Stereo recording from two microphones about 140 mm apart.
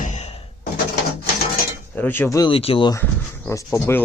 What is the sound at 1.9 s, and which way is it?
Speech, 15° left (ahead or behind).